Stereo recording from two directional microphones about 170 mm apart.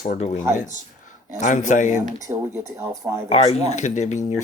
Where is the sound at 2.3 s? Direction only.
20° right (ahead or behind).